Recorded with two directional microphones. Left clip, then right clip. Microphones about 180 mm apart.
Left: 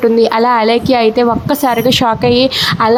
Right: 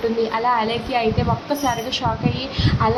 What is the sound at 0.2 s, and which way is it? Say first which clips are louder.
A woman's voice: left 9 dB; 50° left (ahead or behind).